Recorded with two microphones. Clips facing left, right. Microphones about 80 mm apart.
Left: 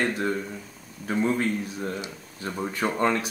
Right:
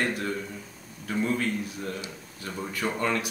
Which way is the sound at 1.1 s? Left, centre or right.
Left.